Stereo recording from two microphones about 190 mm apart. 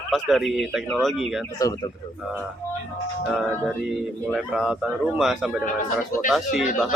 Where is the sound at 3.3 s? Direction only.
Centre (ahead or behind).